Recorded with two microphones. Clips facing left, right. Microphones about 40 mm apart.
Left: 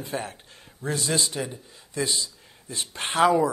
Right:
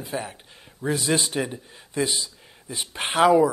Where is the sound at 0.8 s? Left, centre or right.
Right.